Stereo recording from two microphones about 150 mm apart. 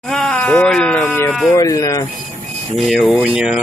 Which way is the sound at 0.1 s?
5° left (ahead or behind).